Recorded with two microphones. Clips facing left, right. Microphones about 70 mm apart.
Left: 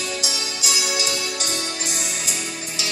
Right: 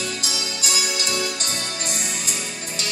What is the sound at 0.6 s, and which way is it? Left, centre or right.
Music, right.